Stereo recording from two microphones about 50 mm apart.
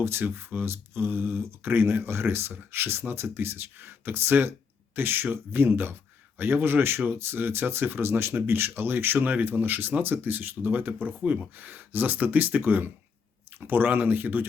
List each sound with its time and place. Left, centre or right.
0.0 s speech: right